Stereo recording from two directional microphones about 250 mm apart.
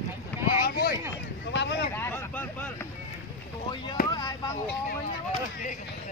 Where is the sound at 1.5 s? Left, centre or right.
Left.